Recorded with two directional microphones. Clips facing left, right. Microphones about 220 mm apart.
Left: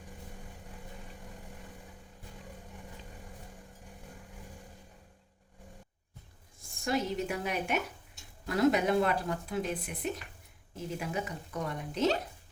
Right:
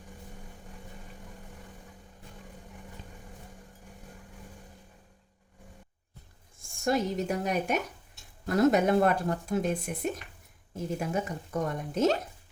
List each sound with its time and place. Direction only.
6.8 s a woman's voice: 45° right (ahead or behind)